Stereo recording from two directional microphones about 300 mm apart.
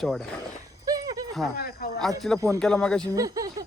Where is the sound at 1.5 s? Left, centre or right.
Left.